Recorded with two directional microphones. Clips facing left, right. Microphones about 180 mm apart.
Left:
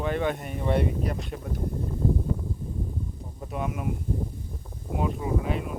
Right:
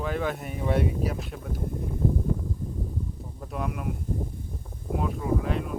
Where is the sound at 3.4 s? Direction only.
Centre (ahead or behind).